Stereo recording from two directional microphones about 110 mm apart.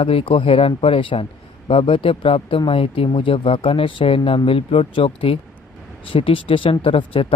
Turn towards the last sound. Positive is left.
turn(degrees=55)  # may be behind; listen again after turning